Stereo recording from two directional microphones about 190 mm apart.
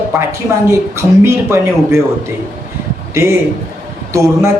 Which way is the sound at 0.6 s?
15° right (ahead or behind).